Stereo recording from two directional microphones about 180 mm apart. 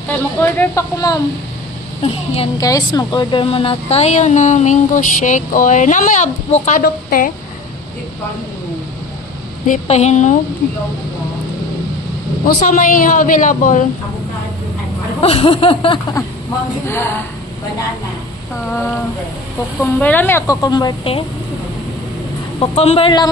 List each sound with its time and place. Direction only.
0.4 s speech: 15° left (ahead or behind)
2.0 s speech: 30° left (ahead or behind)
2.6 s speech: 20° left (ahead or behind); by 6.8 s 40° left (ahead or behind)
6.8 s a woman's voice: 50° left (ahead or behind)
9.7 s speech: 40° left (ahead or behind)
12.5 s a woman's voice: 45° left (ahead or behind)
15.1 s a sound: 30° left (ahead or behind)
16.8 s speech: 15° left (ahead or behind)
19.8 s speech: 10° left (ahead or behind); by 21.2 s 25° left (ahead or behind)
22.6 s speech: 35° left (ahead or behind)